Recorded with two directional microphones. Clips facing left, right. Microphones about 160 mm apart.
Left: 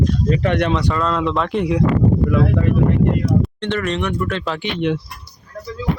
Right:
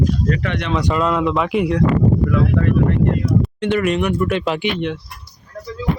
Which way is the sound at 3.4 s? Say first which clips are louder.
Right 3 dB; 5° right (ahead or behind).